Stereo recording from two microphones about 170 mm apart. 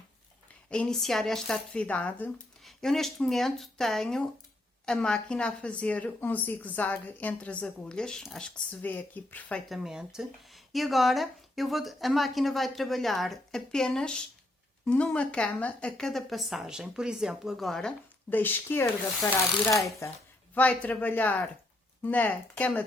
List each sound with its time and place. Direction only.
0.7 s speech: 5° left (ahead or behind)